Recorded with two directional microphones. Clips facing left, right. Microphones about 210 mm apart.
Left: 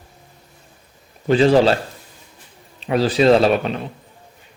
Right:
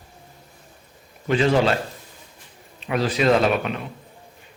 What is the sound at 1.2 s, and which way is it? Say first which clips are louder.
Speech: left 5 dB; 35° left (ahead or behind).